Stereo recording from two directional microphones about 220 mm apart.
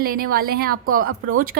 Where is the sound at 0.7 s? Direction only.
70° right (ahead or behind).